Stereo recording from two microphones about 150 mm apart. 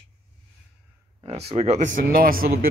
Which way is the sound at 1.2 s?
45° right (ahead or behind).